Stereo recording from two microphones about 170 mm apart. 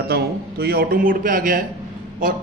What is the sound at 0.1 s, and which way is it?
A man's voice, 70° right (ahead or behind).